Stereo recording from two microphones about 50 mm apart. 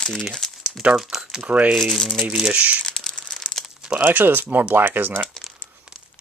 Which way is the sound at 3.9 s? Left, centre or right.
Right.